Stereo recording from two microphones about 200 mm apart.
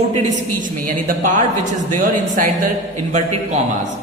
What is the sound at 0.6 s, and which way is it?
Speech, 40° right (ahead or behind).